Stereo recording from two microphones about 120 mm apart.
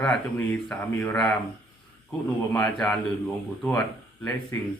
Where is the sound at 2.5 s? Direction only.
10° left (ahead or behind).